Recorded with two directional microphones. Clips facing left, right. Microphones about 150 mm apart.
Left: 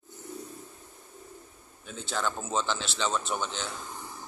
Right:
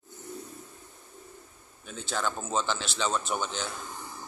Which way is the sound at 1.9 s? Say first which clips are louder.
Even; centre (ahead or behind).